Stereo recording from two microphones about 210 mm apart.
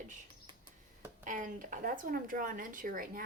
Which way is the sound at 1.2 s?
40° right (ahead or behind).